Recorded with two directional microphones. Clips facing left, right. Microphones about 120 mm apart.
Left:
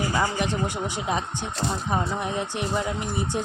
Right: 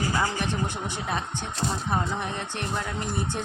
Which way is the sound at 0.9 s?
15° left (ahead or behind).